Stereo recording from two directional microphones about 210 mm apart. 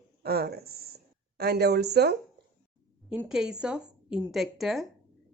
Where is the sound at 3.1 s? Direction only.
5° right (ahead or behind).